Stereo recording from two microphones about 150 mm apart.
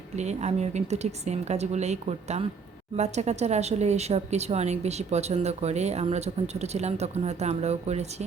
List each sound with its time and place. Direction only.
0.2 s speech: 50° right (ahead or behind)